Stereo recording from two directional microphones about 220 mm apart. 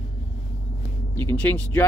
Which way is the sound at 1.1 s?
10° left (ahead or behind).